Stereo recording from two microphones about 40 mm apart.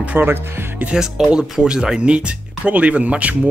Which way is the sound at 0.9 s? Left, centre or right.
Centre.